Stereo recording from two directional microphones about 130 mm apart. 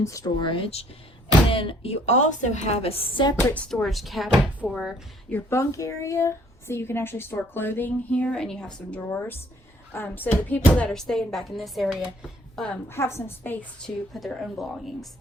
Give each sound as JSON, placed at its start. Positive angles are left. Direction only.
{"t": 0.0, "sound": "a woman's voice", "side_deg": 25}
{"t": 0.4, "sound": "a woman's voice", "side_deg": 45}
{"t": 3.5, "sound": "speech", "side_deg": 5}
{"t": 5.3, "sound": "speech", "side_deg": 20}
{"t": 12.9, "sound": "a woman's voice", "side_deg": 20}
{"t": 14.1, "sound": "speech", "side_deg": 5}